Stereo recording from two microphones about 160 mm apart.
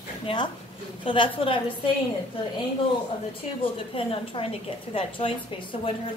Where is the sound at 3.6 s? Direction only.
35° left (ahead or behind).